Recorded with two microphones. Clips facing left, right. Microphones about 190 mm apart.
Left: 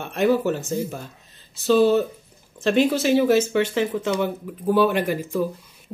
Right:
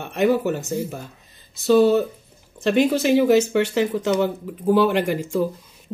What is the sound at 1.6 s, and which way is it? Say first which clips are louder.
Speech: right 1 dB; 15° right (ahead or behind).